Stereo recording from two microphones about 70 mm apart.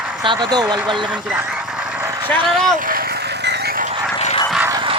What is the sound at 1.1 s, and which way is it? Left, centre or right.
Speech, centre.